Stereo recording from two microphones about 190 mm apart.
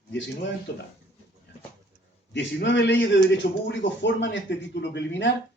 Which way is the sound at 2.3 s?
65° left (ahead or behind).